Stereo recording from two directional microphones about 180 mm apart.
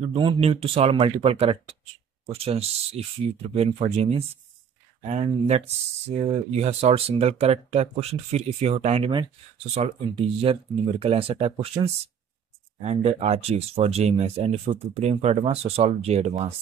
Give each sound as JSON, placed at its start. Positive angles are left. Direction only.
{"t": 0.0, "sound": "speech", "side_deg": -30}
{"t": 6.0, "sound": "speech", "side_deg": -35}